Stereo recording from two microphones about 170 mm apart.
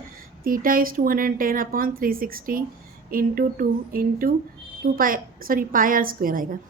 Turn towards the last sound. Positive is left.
turn(degrees=-55)  # may be behind; listen again after turning